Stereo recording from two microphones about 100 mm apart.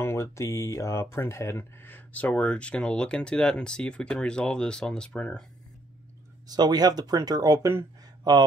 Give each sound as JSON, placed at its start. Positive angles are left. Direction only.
{"t": 0.0, "sound": "speech", "side_deg": 30}
{"t": 6.4, "sound": "speech", "side_deg": -40}
{"t": 8.2, "sound": "speech", "side_deg": -45}